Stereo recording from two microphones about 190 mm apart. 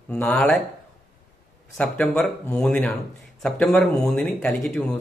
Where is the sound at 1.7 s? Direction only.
5° left (ahead or behind).